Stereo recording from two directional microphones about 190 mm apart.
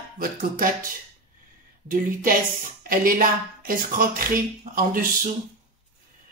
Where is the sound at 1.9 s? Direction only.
45° right (ahead or behind).